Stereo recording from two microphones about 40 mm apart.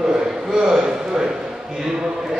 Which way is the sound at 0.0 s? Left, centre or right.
Centre.